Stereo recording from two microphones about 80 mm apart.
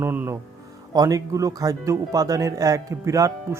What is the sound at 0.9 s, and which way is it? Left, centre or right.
Speech, right.